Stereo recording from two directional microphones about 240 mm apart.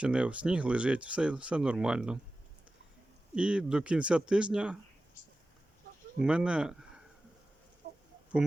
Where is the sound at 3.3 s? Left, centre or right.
Centre.